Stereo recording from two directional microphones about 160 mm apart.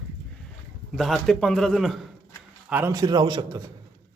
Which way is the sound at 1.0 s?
Centre (ahead or behind).